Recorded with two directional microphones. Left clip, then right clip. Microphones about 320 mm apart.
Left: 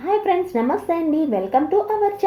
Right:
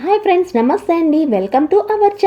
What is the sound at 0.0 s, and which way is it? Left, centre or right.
Speech, right.